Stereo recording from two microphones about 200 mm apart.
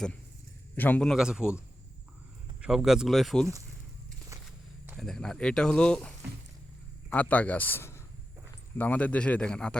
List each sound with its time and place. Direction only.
0.8 s speech: 10° left (ahead or behind)
4.3 s a sound: 15° right (ahead or behind)
4.9 s speech: centre (ahead or behind)